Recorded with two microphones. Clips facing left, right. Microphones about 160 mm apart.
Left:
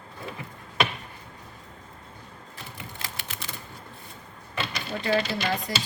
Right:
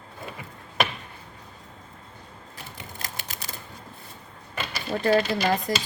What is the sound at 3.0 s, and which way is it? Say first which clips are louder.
Typewriter: right 2 dB; 40° right (ahead or behind).